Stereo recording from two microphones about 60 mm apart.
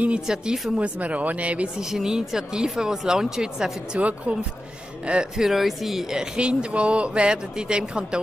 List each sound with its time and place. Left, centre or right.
0.3 s speech: centre
1.8 s speech: centre
5.4 s speech: centre
6.3 s speech: centre